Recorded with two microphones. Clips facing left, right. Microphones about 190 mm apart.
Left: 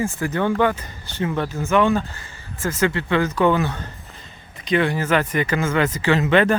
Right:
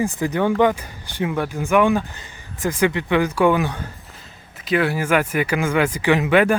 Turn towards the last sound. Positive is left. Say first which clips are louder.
# right 1 dB
turn(degrees=-10)  # may be behind; listen again after turning